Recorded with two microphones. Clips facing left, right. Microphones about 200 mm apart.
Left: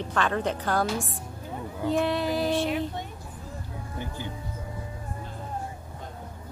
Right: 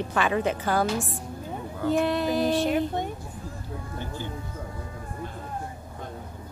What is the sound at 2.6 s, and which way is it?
Speech, 45° right (ahead or behind).